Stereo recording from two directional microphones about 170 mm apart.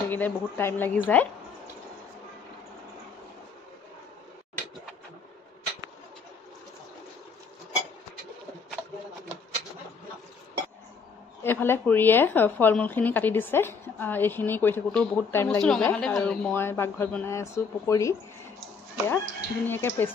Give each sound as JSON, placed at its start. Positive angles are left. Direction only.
{"t": 0.1, "sound": "a woman's voice", "side_deg": 15}
{"t": 11.4, "sound": "a woman's voice", "side_deg": 15}